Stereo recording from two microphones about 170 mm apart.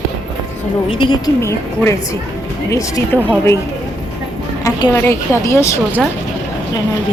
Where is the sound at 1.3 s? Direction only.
15° left (ahead or behind).